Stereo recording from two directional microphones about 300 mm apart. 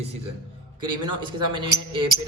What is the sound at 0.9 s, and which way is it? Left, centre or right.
Speech, centre.